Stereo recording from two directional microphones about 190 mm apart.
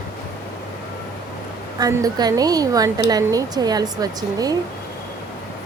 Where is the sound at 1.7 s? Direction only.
20° right (ahead or behind).